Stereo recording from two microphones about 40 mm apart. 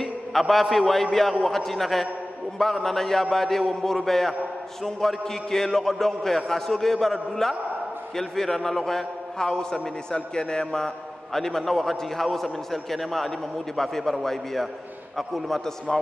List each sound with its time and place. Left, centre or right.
0.0 s a man's voice: centre